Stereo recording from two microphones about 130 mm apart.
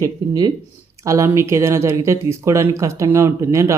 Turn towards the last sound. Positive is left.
turn(degrees=-20)  # may be behind; listen again after turning